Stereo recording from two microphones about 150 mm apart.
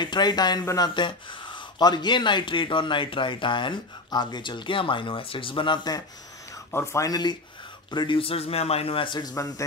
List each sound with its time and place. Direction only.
0.0 s speech: 30° left (ahead or behind)
6.5 s speech: 20° left (ahead or behind)